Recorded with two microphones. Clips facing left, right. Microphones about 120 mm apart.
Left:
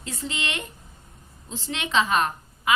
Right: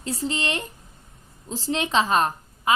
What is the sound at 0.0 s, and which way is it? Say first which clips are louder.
A woman's voice: right 5 dB; 35° right (ahead or behind).